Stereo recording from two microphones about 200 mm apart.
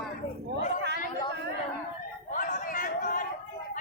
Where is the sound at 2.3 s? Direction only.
40° left (ahead or behind).